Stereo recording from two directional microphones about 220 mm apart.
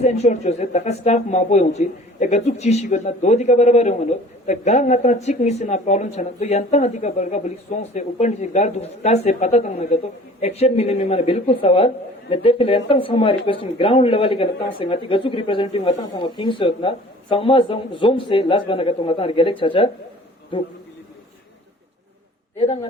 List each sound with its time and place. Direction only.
0.0 s speech: 30° left (ahead or behind)